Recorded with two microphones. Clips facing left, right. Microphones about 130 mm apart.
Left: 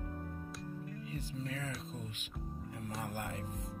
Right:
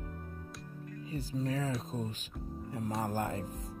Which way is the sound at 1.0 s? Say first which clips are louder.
Right 10 dB; 35° right (ahead or behind).